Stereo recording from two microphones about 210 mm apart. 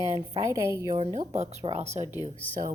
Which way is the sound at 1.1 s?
30° right (ahead or behind).